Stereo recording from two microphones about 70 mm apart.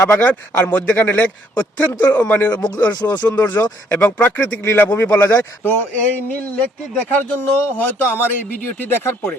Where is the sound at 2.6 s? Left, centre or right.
Left.